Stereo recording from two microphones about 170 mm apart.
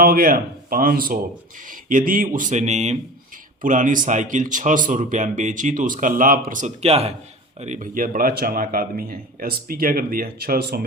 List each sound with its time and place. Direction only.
0.0 s speech: 60° right (ahead or behind); by 7.1 s 35° right (ahead or behind)
7.6 s a man's voice: 45° right (ahead or behind); by 10.8 s 65° right (ahead or behind)